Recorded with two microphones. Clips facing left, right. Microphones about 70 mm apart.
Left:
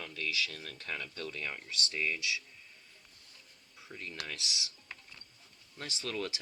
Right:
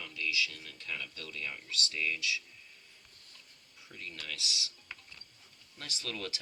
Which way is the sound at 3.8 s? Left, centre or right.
Left.